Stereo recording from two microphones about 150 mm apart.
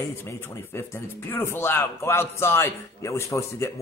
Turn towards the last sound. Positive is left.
turn(degrees=20)  # may be behind; listen again after turning